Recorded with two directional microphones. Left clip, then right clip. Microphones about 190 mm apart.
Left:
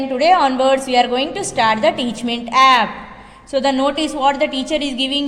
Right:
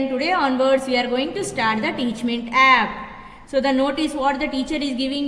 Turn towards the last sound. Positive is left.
turn(degrees=20)  # may be behind; listen again after turning